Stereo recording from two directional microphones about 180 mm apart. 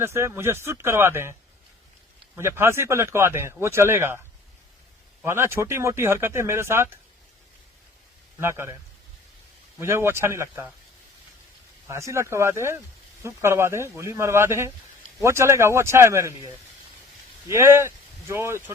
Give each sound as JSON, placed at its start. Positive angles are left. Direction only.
{"t": 0.0, "sound": "speech", "side_deg": -15}
{"t": 5.2, "sound": "speech", "side_deg": -15}
{"t": 8.4, "sound": "speech", "side_deg": -15}
{"t": 11.9, "sound": "speech", "side_deg": -15}
{"t": 17.5, "sound": "speech", "side_deg": -15}